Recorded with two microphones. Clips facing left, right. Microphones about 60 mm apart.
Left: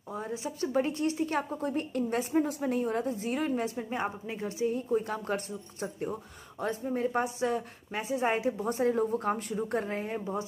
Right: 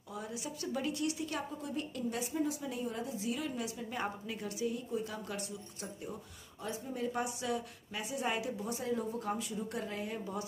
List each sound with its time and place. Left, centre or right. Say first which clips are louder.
0.1 s a woman's voice: left 6 dB; left
3.9 s a woman's voice: left 5 dB; left